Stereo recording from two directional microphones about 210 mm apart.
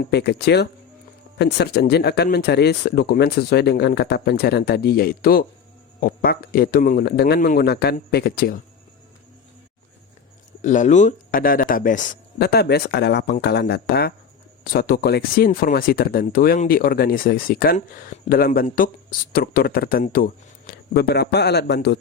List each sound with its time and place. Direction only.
0.0 s speech: 50° left (ahead or behind)
10.6 s speech: 35° left (ahead or behind); by 21.9 s 50° left (ahead or behind)